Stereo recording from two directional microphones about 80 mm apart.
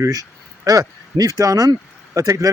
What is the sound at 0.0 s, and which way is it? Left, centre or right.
Speech, right.